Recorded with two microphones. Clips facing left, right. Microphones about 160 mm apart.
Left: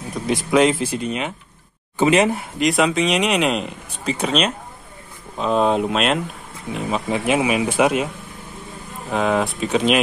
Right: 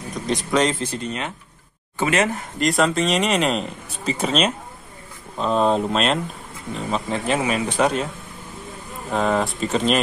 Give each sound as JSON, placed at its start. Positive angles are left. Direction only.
{"t": 0.1, "sound": "speech", "side_deg": 5}
{"t": 2.6, "sound": "speech", "side_deg": 0}
{"t": 9.1, "sound": "speech", "side_deg": 5}